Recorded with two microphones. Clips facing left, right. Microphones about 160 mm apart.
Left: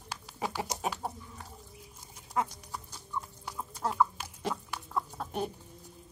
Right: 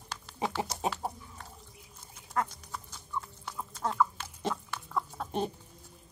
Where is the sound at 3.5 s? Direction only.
10° left (ahead or behind).